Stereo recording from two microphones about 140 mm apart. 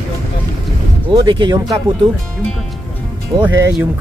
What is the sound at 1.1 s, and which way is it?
Speech, 35° right (ahead or behind).